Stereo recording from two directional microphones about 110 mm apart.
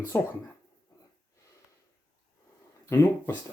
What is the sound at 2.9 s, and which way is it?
Speech, 25° left (ahead or behind).